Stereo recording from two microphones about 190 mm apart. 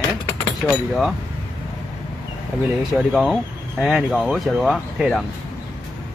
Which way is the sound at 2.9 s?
Centre (ahead or behind).